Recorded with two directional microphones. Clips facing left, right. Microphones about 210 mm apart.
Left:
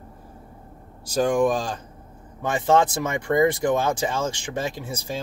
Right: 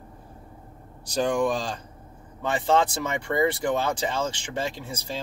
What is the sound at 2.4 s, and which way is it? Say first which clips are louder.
Speech: left 3 dB; 15° left (ahead or behind).